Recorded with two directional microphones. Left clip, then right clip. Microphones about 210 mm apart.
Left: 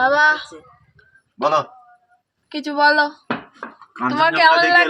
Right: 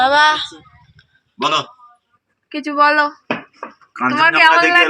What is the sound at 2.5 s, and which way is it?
Speech, 20° left (ahead or behind).